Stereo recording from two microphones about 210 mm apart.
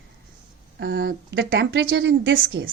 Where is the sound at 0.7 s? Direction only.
60° right (ahead or behind).